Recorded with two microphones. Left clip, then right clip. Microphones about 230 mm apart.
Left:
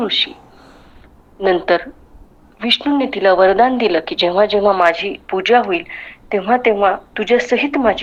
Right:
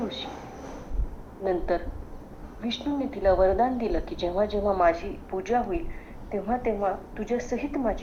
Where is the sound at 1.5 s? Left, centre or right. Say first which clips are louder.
Left 12 dB; left.